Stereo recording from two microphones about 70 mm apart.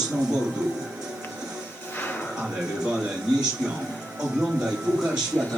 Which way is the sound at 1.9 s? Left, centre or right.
Left.